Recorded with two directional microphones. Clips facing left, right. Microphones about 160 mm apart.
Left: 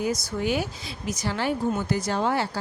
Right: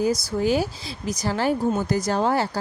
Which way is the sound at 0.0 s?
35° right (ahead or behind).